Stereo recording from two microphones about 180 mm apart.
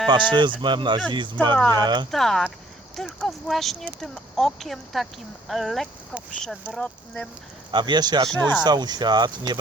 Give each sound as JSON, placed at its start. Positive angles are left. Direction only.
{"t": 0.1, "sound": "speech", "side_deg": -25}
{"t": 2.0, "sound": "speech", "side_deg": 0}
{"t": 7.7, "sound": "speech", "side_deg": -25}